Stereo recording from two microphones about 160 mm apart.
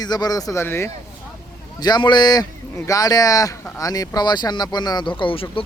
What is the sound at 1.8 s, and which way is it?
Speech, 25° left (ahead or behind).